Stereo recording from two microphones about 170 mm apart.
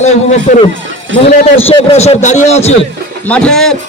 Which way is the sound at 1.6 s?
35° left (ahead or behind).